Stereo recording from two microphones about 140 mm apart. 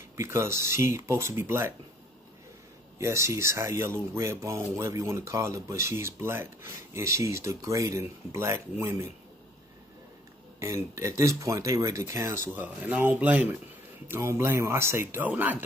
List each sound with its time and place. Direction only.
0.2 s speech: 20° right (ahead or behind)
3.0 s speech: 20° right (ahead or behind)
10.6 s speech: 20° right (ahead or behind)